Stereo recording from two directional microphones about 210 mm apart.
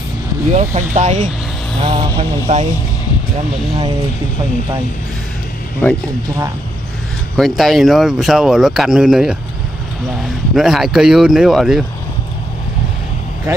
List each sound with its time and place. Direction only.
0.6 s speech: 35° right (ahead or behind)
1.8 s speech: 25° right (ahead or behind)
5.8 s speech: 10° left (ahead or behind)
7.3 s speech: centre (ahead or behind)
10.5 s speech: centre (ahead or behind)